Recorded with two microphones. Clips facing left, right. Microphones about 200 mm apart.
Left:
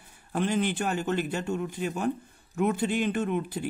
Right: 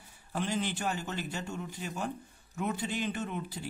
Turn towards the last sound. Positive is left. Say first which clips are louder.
# left 8 dB
turn(degrees=60)  # may be behind; listen again after turning